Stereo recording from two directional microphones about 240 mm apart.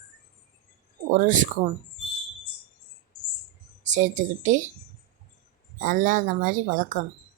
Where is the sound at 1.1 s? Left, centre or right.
Right.